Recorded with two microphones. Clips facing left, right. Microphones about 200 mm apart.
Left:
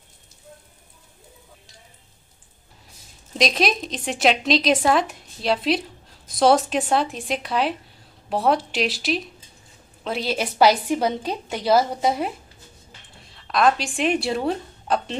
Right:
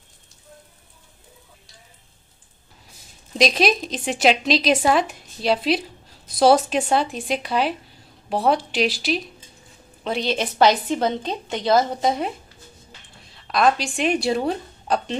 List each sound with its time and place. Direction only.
3.3 s a woman's voice: centre (ahead or behind)